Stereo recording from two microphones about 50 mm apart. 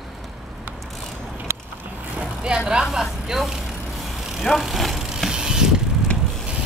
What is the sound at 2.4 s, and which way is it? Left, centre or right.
Speech, centre.